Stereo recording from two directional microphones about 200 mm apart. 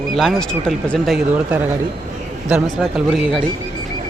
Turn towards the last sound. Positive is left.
turn(degrees=0)  # may be behind; listen again after turning